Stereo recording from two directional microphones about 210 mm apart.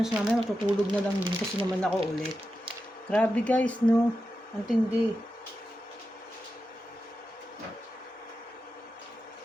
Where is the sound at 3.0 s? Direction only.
5° left (ahead or behind).